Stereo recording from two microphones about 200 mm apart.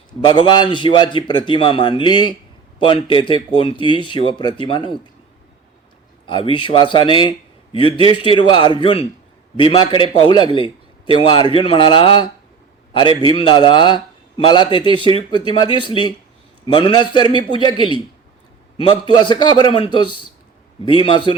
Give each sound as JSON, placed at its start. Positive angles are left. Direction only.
{"t": 0.4, "sound": "a man's voice", "side_deg": 25}
{"t": 6.2, "sound": "a man's voice", "side_deg": 25}